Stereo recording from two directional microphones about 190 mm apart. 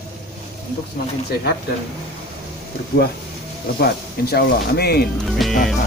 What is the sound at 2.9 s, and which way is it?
Speech, 50° left (ahead or behind).